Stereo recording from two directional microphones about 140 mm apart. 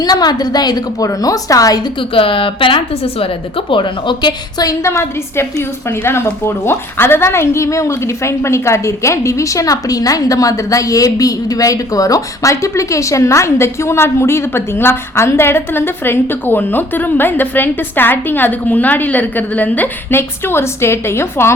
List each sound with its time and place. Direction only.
0.0 s a woman's voice: 30° left (ahead or behind)
2.0 s a woman's voice: 40° left (ahead or behind); by 21.5 s 20° left (ahead or behind)